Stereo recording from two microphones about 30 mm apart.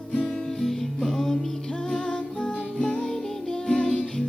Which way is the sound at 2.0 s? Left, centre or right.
Left.